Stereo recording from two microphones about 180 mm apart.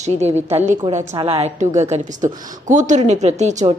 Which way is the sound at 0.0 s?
40° right (ahead or behind).